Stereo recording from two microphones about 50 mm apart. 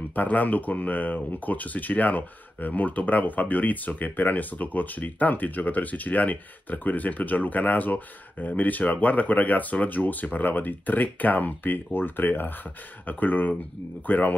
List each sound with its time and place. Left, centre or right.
0.1 s speech: left